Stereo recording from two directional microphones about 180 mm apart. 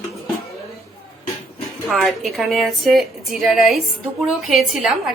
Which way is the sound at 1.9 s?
Centre (ahead or behind).